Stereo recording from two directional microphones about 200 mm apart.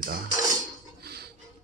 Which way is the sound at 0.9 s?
55° right (ahead or behind).